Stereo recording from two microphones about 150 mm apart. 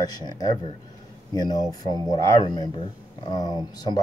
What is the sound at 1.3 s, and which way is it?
Speech, 25° left (ahead or behind).